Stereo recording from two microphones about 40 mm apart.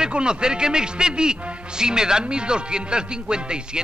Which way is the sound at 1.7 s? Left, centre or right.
Centre.